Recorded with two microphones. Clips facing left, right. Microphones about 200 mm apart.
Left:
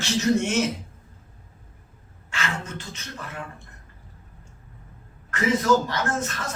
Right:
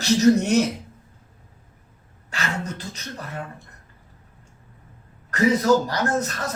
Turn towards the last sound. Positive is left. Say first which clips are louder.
# right 3 dB
turn(degrees=-40)  # may be behind; listen again after turning